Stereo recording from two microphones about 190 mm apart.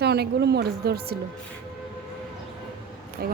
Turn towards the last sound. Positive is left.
turn(degrees=-55)  # may be behind; listen again after turning